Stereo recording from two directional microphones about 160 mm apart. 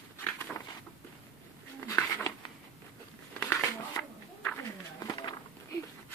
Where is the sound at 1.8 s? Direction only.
20° left (ahead or behind).